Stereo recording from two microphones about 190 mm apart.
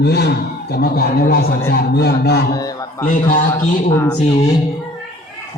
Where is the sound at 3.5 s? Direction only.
15° left (ahead or behind).